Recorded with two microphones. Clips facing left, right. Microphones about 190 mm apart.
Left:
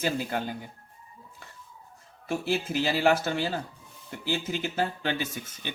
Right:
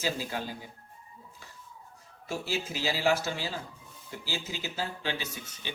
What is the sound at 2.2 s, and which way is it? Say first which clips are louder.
Speech: left 5 dB; 60° left (ahead or behind).